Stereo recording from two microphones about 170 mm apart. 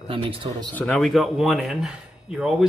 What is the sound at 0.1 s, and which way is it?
Speech, 30° right (ahead or behind).